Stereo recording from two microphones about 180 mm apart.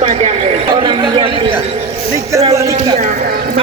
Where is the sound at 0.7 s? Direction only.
25° right (ahead or behind).